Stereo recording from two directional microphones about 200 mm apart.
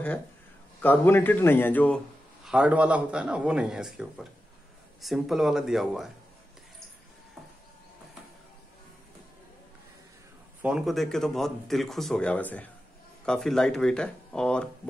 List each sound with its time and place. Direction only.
0.7 s speech: 10° left (ahead or behind)
2.4 s speech: 5° right (ahead or behind)
10.6 s speech: 5° right (ahead or behind)